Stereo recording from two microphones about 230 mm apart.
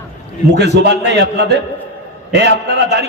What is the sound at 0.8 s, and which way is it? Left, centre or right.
A man's voice, right.